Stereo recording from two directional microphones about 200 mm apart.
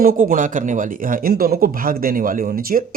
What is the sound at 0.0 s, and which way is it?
Speech, 45° right (ahead or behind).